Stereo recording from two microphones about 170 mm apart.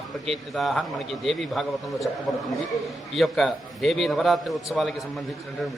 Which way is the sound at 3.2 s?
Centre (ahead or behind).